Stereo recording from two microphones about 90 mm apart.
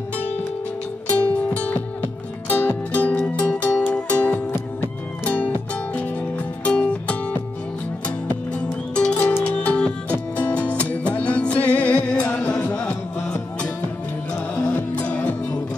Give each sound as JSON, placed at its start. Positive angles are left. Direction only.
{"t": 1.2, "sound": "music", "side_deg": 15}
{"t": 14.3, "sound": "music", "side_deg": 10}